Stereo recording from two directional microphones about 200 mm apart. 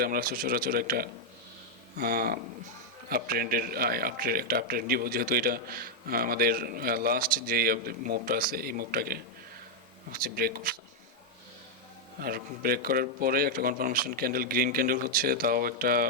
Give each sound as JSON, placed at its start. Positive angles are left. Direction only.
{"t": 0.0, "sound": "a man's voice", "side_deg": -45}
{"t": 12.2, "sound": "a man's voice", "side_deg": -50}